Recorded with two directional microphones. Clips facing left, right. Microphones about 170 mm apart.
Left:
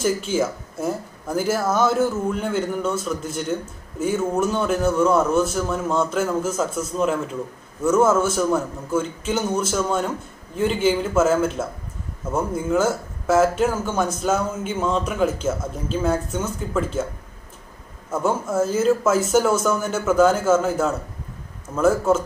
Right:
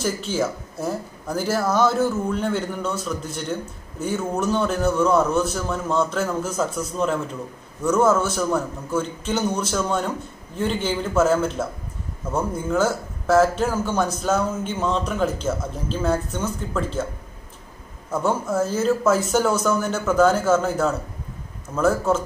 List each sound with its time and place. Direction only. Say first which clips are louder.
0.0 s a man's voice: left 2 dB; 5° left (ahead or behind)
18.1 s a man's voice: even; 5° left (ahead or behind)